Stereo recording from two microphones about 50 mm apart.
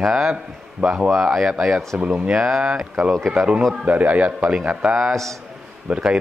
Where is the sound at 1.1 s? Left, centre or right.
Centre.